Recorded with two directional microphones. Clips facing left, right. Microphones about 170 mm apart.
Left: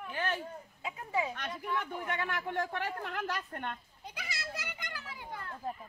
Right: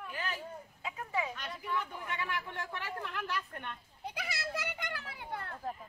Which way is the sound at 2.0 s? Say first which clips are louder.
Left 3 dB; 55° left (ahead or behind).